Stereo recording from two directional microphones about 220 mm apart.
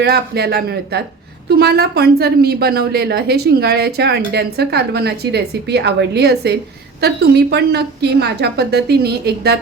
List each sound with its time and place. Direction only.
0.0 s a woman's voice: 45° right (ahead or behind)